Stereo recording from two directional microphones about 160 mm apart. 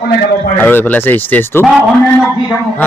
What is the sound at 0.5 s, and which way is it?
A man's voice, 10° left (ahead or behind).